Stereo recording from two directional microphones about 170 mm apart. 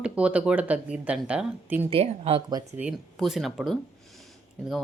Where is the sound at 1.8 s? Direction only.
35° right (ahead or behind).